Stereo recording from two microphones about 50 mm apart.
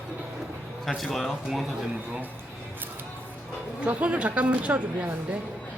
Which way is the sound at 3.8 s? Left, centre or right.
Right.